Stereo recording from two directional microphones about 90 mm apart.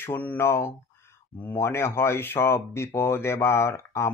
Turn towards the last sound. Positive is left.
turn(degrees=30)  # may be behind; listen again after turning